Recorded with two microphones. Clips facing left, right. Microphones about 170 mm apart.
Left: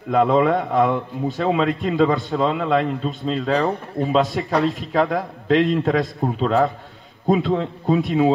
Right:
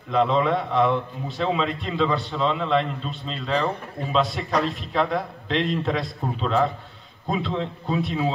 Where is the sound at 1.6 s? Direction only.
40° left (ahead or behind).